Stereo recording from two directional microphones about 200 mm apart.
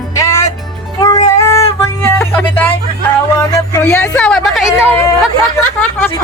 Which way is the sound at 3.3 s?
15° left (ahead or behind).